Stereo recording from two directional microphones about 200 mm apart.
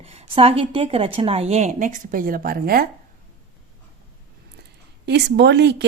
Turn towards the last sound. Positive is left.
turn(degrees=-55)  # may be behind; listen again after turning